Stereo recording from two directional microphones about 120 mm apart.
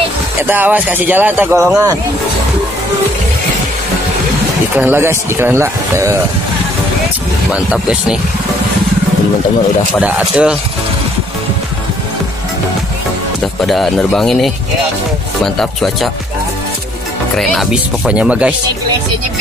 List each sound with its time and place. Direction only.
0.4 s speech: 15° right (ahead or behind)
4.7 s speech: 15° right (ahead or behind)
7.5 s speech: 10° right (ahead or behind)
9.9 s speech: 10° right (ahead or behind)
13.6 s speech: centre (ahead or behind)
17.4 s speech: 5° right (ahead or behind)